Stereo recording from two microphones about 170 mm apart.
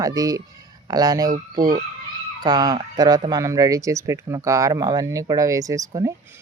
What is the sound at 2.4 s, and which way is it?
Speech, 25° right (ahead or behind).